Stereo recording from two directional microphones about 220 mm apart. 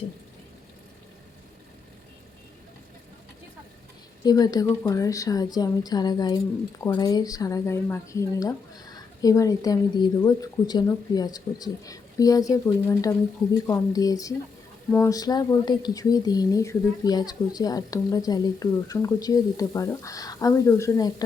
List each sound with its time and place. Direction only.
4.2 s speech: 15° left (ahead or behind)